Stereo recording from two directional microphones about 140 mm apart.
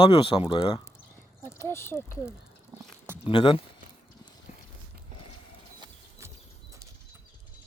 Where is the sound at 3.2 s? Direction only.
35° left (ahead or behind).